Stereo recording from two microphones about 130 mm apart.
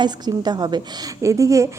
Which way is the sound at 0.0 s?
35° right (ahead or behind).